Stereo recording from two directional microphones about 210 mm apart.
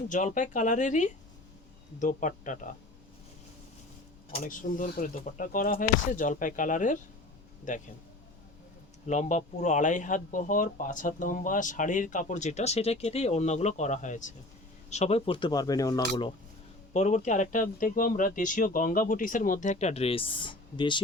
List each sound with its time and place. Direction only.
0.1 s speech: 35° left (ahead or behind)
4.4 s speech: 40° left (ahead or behind)
9.0 s speech: 35° left (ahead or behind)
16.9 s speech: 35° left (ahead or behind)